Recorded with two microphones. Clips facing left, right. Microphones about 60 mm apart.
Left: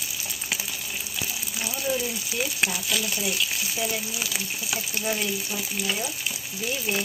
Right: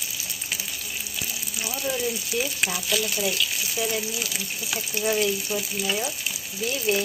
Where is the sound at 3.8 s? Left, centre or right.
Centre.